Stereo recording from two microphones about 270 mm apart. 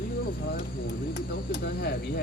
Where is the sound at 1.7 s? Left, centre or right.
Left.